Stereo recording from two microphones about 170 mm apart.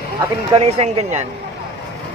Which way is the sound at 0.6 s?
35° right (ahead or behind).